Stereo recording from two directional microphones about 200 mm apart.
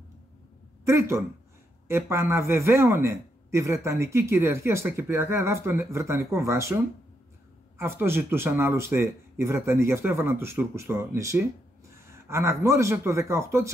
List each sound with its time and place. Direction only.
0.8 s speech: 15° right (ahead or behind)
7.7 s speech: 10° right (ahead or behind)